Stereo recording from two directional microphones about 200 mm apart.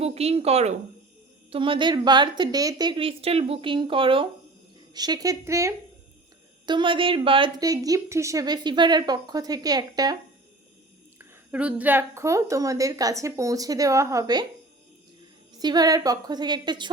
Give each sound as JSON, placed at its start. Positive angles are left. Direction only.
{"t": 0.0, "sound": "a woman's voice", "side_deg": -30}
{"t": 11.2, "sound": "a woman's voice", "side_deg": -5}
{"t": 15.5, "sound": "a woman's voice", "side_deg": -20}